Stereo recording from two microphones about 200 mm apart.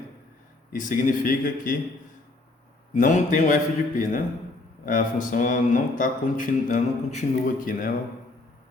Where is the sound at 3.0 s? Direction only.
40° left (ahead or behind).